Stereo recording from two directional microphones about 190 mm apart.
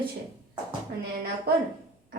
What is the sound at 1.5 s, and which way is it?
Speech, 55° right (ahead or behind).